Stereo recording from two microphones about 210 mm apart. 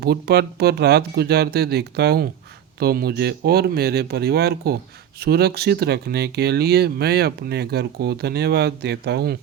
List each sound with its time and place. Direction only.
0.0 s speech: 50° right (ahead or behind)